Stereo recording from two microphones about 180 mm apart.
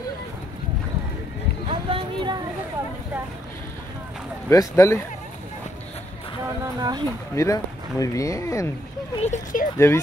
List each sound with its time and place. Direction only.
1.7 s a sound: 25° right (ahead or behind)
4.5 s speech: 15° left (ahead or behind)
6.6 s a sound: 20° right (ahead or behind)
7.3 s speech: 20° left (ahead or behind)
9.2 s speech: 45° left (ahead or behind)
9.8 s speech: 15° left (ahead or behind)